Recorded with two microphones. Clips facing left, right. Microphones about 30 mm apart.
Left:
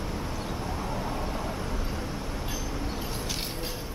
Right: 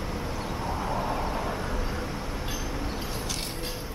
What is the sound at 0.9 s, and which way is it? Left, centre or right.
Vehicle, centre.